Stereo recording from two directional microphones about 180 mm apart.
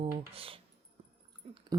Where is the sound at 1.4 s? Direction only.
35° right (ahead or behind).